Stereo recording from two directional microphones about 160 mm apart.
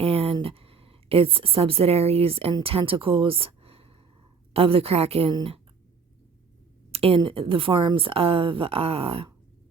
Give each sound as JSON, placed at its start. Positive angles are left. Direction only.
{"t": 0.0, "sound": "a sound", "side_deg": -40}
{"t": 0.3, "sound": "a woman's voice", "side_deg": -35}
{"t": 6.9, "sound": "a woman's voice", "side_deg": -35}